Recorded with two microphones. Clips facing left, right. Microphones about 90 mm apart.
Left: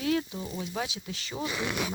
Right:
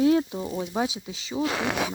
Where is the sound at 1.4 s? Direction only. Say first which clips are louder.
Right 5 dB; 90° right.